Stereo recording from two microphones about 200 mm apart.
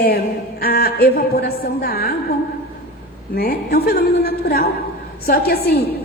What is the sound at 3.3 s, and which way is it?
A woman's voice, 50° left (ahead or behind).